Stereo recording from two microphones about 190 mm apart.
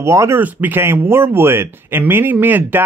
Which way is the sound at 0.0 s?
15° right (ahead or behind).